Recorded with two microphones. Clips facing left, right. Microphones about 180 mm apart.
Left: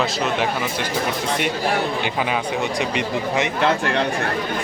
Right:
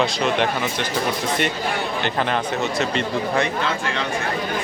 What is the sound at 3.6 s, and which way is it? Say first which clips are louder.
Speech: left 5 dB; 60° left (ahead or behind).